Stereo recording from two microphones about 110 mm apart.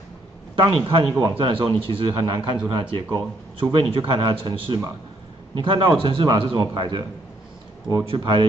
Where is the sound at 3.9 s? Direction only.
50° right (ahead or behind).